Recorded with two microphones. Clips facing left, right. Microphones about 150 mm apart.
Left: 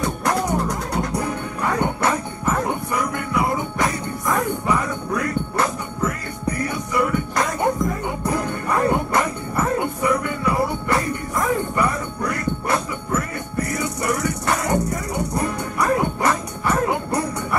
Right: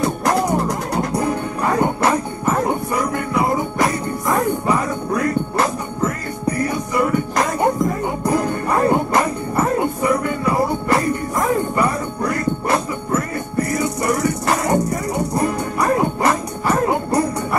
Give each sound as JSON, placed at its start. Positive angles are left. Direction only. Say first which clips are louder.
{"t": 0.0, "sound": "music", "louder": "right 4 dB", "side_deg": -35}